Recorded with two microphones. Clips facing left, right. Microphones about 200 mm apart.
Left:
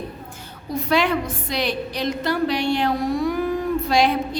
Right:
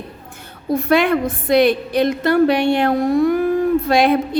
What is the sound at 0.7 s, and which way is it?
A woman's voice, 55° right (ahead or behind).